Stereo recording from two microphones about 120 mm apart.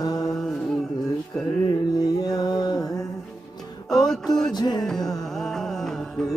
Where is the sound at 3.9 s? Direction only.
5° left (ahead or behind).